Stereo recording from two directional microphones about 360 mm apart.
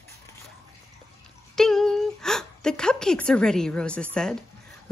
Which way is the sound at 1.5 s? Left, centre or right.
Centre.